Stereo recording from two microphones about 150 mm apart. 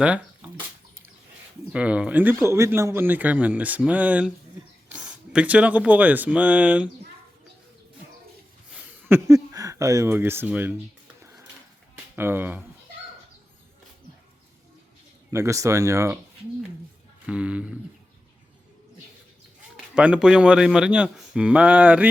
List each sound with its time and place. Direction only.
1.7 s speech: 5° right (ahead or behind)
8.7 s speech: 15° right (ahead or behind)
11.2 s a sound: 15° right (ahead or behind)
12.1 s speech: 15° right (ahead or behind)
15.3 s speech: 20° right (ahead or behind)
17.2 s speech: 10° right (ahead or behind)
20.0 s speech: 5° right (ahead or behind)